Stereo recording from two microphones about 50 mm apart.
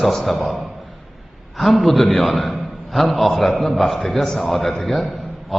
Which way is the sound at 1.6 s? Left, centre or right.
Centre.